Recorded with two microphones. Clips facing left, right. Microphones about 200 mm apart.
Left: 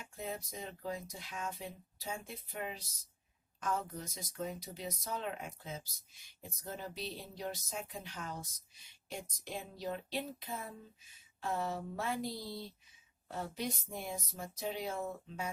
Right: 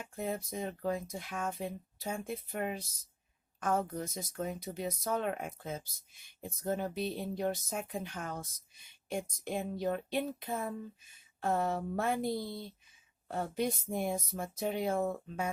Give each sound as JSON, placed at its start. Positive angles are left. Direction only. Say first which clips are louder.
{"t": 0.0, "sound": "speech", "louder": "right 6 dB", "side_deg": -50}